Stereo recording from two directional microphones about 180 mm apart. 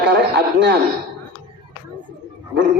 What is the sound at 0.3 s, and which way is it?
Speech, 65° right (ahead or behind).